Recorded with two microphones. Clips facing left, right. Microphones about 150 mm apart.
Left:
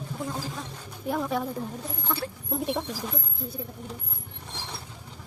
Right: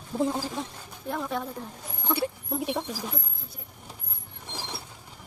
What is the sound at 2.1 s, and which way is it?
Rodents, 15° right (ahead or behind).